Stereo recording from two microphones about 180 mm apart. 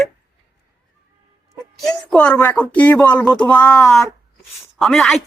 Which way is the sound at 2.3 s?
20° left (ahead or behind).